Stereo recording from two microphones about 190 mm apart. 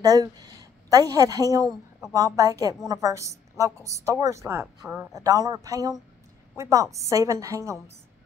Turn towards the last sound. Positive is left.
turn(degrees=-15)  # may be behind; listen again after turning